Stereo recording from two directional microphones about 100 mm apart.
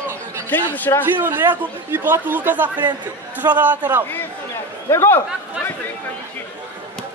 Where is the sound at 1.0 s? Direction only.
20° right (ahead or behind).